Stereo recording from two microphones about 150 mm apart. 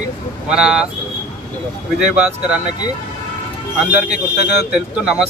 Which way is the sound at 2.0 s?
5° right (ahead or behind).